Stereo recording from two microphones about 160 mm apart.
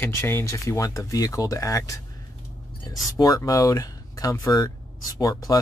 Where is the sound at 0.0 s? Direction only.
15° left (ahead or behind).